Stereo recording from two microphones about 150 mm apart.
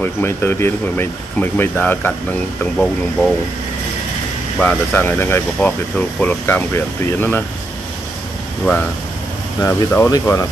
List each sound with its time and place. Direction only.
0.0 s speech: 15° left (ahead or behind)
4.6 s speech: 10° left (ahead or behind)
9.6 s speech: 15° left (ahead or behind)